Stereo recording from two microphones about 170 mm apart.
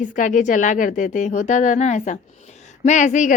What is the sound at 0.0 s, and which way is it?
Speech, 50° left (ahead or behind).